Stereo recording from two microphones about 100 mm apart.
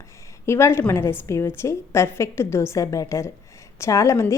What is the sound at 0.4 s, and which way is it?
A woman's voice, 25° left (ahead or behind).